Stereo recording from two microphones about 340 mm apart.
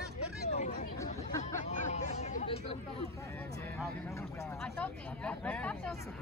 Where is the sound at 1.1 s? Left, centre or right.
Centre.